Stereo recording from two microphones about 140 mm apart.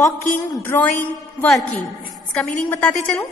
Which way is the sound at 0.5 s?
15° left (ahead or behind).